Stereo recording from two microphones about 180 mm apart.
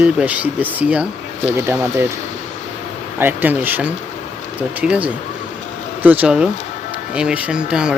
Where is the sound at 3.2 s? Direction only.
10° right (ahead or behind).